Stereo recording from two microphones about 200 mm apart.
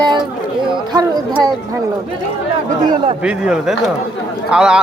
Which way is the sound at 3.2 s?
5° right (ahead or behind).